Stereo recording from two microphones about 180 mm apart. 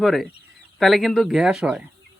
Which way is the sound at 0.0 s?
Centre (ahead or behind).